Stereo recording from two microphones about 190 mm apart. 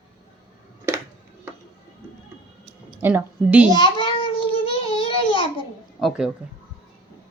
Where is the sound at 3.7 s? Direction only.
25° left (ahead or behind).